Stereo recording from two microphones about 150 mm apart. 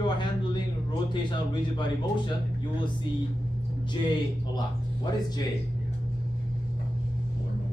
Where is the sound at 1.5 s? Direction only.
30° left (ahead or behind).